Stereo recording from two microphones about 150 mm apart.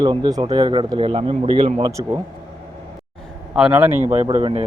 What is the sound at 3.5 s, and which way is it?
Speech, 10° right (ahead or behind).